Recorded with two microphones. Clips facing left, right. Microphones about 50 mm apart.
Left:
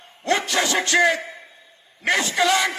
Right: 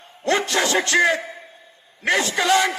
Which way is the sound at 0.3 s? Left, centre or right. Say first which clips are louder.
Right 2 dB; right.